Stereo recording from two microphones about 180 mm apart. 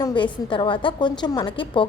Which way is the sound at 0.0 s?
25° left (ahead or behind).